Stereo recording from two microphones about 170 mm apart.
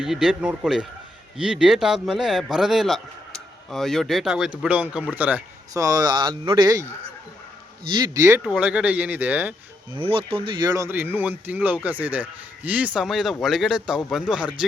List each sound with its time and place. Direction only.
0.0 s speech: 5° right (ahead or behind)
5.8 s speech: 20° right (ahead or behind)
7.9 s speech: 20° right (ahead or behind)
8.4 s speech: 5° right (ahead or behind)
10.0 s speech: 35° right (ahead or behind); by 14.5 s 5° right (ahead or behind)